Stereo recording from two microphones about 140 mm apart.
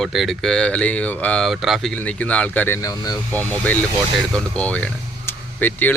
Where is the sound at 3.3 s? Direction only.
10° left (ahead or behind).